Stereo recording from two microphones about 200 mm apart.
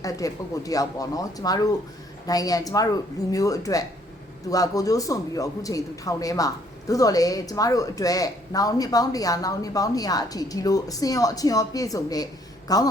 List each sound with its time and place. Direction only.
0.0 s speech: 15° left (ahead or behind)